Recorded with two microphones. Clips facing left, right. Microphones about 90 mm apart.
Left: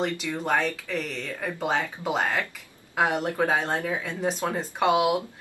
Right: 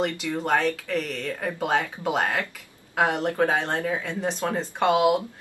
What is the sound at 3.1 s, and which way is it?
Speech, 15° left (ahead or behind).